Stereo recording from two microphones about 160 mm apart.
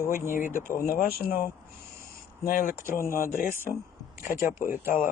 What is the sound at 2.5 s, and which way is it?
Speech, 60° left (ahead or behind).